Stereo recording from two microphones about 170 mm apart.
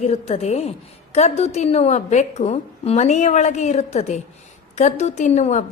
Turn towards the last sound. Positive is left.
turn(degrees=45)  # may be behind; listen again after turning